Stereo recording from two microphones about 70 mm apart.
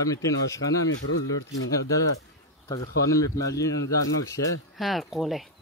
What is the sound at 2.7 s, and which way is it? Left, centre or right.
Speech, left.